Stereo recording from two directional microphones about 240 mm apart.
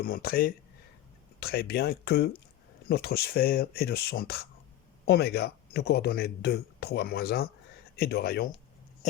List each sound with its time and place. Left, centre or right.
0.0 s speech: left